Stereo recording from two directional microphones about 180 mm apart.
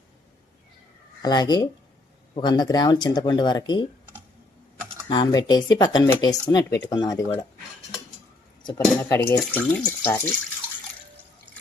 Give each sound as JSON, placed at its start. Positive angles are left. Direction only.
{"t": 1.2, "sound": "speech", "side_deg": 25}
{"t": 5.0, "sound": "speech", "side_deg": 25}
{"t": 8.6, "sound": "speech", "side_deg": 15}